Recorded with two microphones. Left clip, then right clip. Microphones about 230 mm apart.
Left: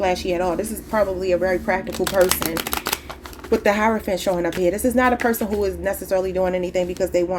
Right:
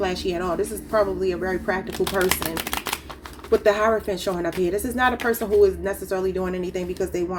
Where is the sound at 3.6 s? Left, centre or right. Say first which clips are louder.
Left 1 dB; left.